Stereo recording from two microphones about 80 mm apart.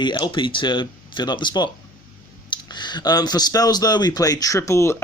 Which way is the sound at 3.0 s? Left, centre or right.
Left.